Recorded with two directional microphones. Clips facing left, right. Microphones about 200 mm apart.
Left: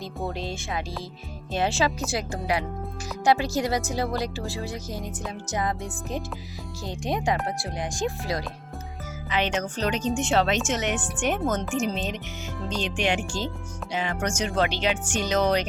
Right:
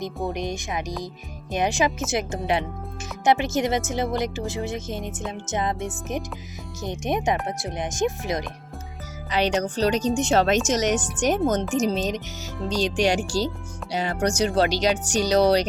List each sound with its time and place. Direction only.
0.3 s speech: 15° right (ahead or behind)
9.3 s speech: 35° right (ahead or behind)